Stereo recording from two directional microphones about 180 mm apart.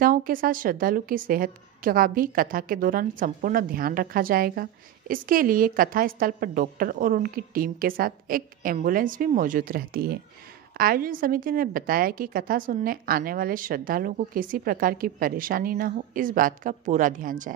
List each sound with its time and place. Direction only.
0.0 s a woman's voice: 50° right (ahead or behind)